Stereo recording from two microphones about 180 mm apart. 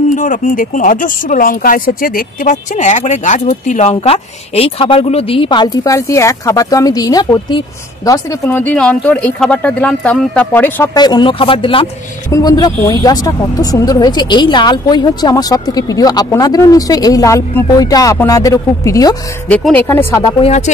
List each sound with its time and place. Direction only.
0.1 s speech: 45° left (ahead or behind); by 8.2 s 25° left (ahead or behind)
8.5 s speech: 10° left (ahead or behind)
11.0 s speech: 25° left (ahead or behind)
19.5 s speech: 10° left (ahead or behind)
20.2 s speech: 30° left (ahead or behind)